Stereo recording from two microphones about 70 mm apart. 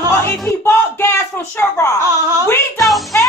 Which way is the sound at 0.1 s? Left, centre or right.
Left.